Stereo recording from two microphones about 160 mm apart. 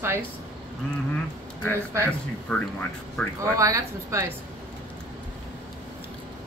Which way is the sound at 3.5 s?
20° right (ahead or behind).